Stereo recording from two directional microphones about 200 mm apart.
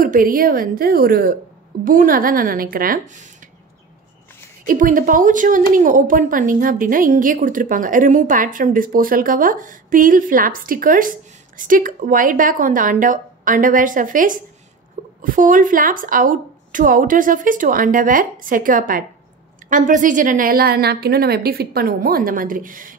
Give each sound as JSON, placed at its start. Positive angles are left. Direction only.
{"t": 0.0, "sound": "a woman's voice", "side_deg": -45}
{"t": 4.6, "sound": "a woman's voice", "side_deg": -40}